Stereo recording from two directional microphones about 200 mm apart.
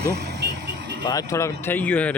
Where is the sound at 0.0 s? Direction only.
55° right (ahead or behind).